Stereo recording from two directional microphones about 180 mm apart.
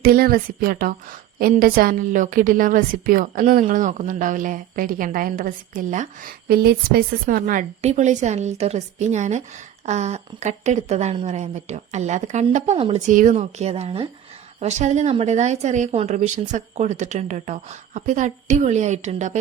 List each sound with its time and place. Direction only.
0.0 s a woman's voice: 55° right (ahead or behind)
6.5 s a woman's voice: 60° right (ahead or behind)
7.8 s speech: 40° right (ahead or behind)